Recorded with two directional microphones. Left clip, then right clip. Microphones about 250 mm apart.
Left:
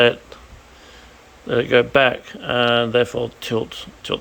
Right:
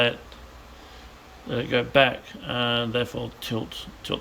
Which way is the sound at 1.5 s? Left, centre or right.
Centre.